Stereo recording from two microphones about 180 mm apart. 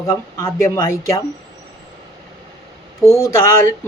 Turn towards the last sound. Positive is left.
turn(degrees=15)  # may be behind; listen again after turning